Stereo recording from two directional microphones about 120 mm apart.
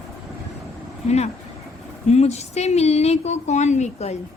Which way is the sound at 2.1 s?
65° left (ahead or behind).